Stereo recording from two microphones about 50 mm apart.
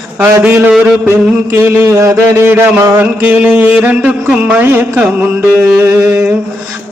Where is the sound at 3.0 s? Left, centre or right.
Right.